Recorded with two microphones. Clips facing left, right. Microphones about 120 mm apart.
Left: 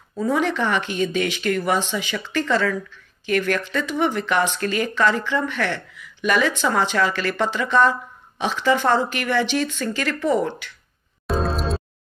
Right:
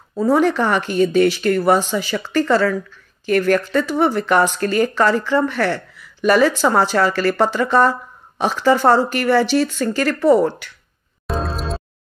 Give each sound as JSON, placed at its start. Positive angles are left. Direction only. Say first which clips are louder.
{"t": 0.1, "sound": "speech", "louder": "right 6 dB", "side_deg": -40}
{"t": 11.2, "sound": "music", "louder": "left 1 dB", "side_deg": 0}